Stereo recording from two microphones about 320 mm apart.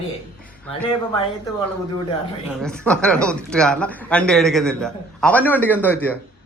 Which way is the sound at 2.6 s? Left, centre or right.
Centre.